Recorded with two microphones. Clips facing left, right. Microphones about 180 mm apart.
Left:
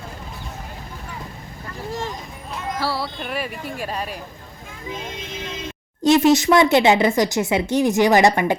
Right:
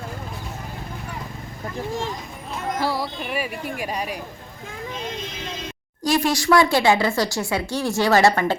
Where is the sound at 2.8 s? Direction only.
15° right (ahead or behind).